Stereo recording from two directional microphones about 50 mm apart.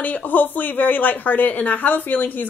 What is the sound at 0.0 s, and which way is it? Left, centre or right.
Speech, left.